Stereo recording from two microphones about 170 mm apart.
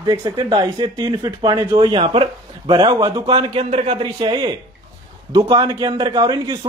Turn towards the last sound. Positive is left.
turn(degrees=-25)  # may be behind; listen again after turning